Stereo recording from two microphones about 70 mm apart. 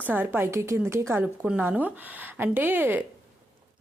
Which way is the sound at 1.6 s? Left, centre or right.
Right.